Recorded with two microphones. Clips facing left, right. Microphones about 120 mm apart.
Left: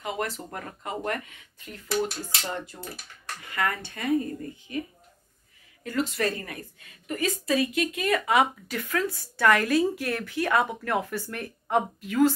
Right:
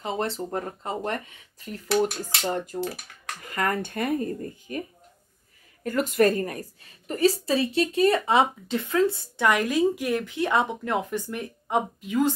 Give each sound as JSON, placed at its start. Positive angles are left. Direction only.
{"t": 0.0, "sound": "speech", "side_deg": -30}
{"t": 2.5, "sound": "speech", "side_deg": -45}
{"t": 5.9, "sound": "a woman's voice", "side_deg": -50}